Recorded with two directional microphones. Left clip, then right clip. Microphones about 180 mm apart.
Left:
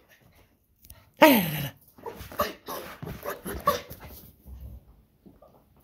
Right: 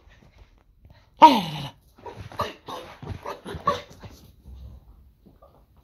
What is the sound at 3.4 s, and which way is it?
Dog, 35° left (ahead or behind).